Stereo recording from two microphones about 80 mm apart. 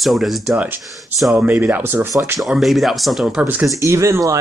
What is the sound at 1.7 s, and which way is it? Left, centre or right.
Speech, right.